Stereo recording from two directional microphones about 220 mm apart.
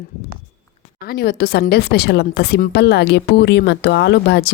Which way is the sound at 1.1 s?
45° left (ahead or behind).